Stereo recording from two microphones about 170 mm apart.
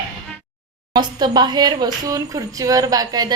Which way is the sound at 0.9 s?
25° right (ahead or behind).